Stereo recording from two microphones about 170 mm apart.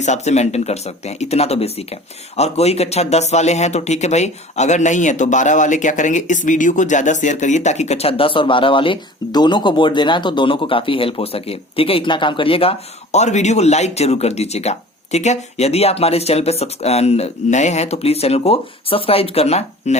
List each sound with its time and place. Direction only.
0.0 s speech: 40° left (ahead or behind)